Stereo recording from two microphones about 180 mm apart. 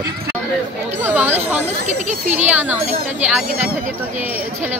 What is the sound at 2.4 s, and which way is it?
Speech, 10° right (ahead or behind).